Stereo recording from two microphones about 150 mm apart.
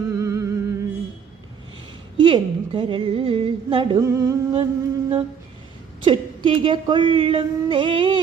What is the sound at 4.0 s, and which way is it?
Music, 20° right (ahead or behind).